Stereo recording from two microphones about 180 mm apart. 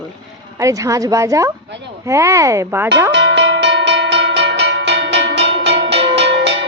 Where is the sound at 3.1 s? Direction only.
75° right (ahead or behind).